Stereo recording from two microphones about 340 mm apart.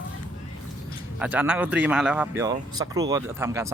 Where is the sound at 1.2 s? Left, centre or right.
Centre.